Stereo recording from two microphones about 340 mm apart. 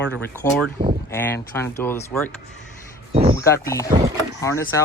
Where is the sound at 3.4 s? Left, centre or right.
Centre.